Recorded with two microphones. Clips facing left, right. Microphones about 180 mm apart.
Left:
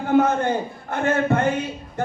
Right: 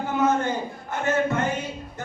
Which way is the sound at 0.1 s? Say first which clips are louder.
Left 5 dB; 55° left (ahead or behind).